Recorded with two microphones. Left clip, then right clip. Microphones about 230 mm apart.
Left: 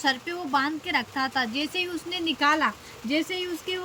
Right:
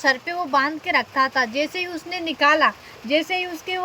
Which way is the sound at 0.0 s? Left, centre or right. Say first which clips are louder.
Right 6 dB; centre.